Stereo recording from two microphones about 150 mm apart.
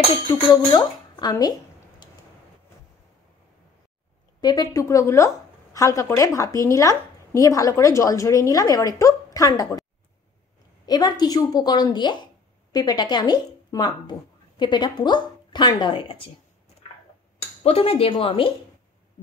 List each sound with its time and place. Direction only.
0.3 s a woman's voice: 25° left (ahead or behind)
4.4 s a woman's voice: 25° left (ahead or behind)
10.9 s a woman's voice: 30° left (ahead or behind)
17.6 s speech: 40° left (ahead or behind)